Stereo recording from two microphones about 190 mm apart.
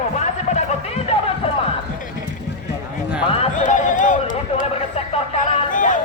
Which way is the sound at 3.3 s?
35° left (ahead or behind).